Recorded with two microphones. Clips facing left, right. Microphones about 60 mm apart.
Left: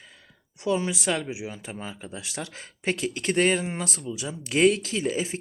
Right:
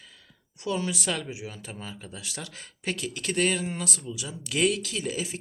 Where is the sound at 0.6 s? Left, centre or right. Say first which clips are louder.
Left 4 dB; left.